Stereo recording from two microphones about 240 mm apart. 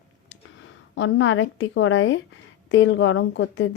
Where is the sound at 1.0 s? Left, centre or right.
Left.